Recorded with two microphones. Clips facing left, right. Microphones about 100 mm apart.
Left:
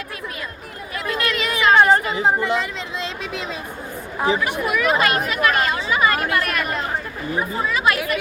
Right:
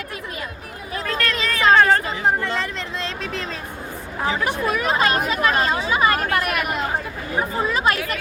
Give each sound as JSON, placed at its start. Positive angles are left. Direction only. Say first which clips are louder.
{"t": 1.0, "sound": "a sound", "louder": "left 1 dB", "side_deg": 10}
{"t": 1.7, "sound": "chatter", "louder": "left 1 dB", "side_deg": 15}
{"t": 2.1, "sound": "speech", "louder": "left 2 dB", "side_deg": 15}
{"t": 4.7, "sound": "speech", "louder": "left 2 dB", "side_deg": -30}
{"t": 6.4, "sound": "speech", "louder": "even", "side_deg": -10}
{"t": 7.3, "sound": "speech", "louder": "right 1 dB", "side_deg": -30}